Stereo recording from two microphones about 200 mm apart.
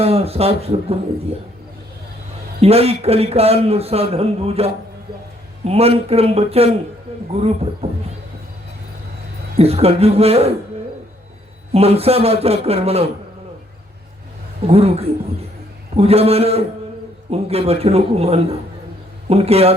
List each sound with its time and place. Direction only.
0.0 s a man's voice: 30° right (ahead or behind)
2.6 s a man's voice: 30° right (ahead or behind)
9.6 s a man's voice: 30° right (ahead or behind)
11.7 s a man's voice: 30° right (ahead or behind)
14.7 s a man's voice: 30° right (ahead or behind)